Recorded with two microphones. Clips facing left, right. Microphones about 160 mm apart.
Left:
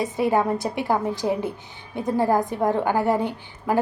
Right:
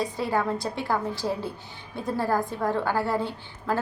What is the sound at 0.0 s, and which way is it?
A woman's voice, 20° left (ahead or behind).